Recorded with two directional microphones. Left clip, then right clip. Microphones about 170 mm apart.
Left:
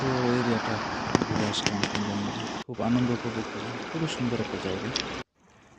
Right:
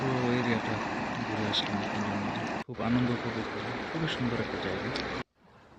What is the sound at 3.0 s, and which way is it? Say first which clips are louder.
Speech: left 2 dB; 60° left (ahead or behind).